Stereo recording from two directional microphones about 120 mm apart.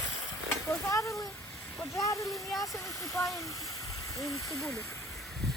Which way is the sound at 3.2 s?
25° left (ahead or behind).